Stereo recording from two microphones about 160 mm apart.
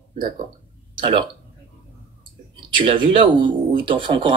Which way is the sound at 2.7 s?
35° right (ahead or behind).